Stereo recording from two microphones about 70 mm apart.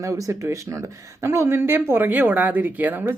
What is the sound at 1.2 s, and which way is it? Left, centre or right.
A woman's voice, right.